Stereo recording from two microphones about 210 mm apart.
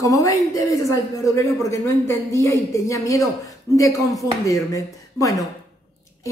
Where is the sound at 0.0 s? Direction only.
15° left (ahead or behind).